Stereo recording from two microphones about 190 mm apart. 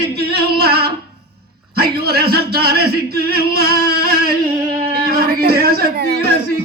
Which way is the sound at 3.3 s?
55° right (ahead or behind).